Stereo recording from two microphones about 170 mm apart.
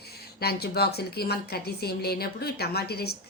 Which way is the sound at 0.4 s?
70° left (ahead or behind).